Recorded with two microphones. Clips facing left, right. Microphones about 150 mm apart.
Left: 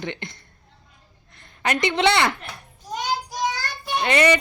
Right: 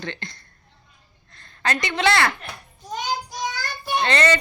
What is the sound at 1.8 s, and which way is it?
Speech, 20° left (ahead or behind).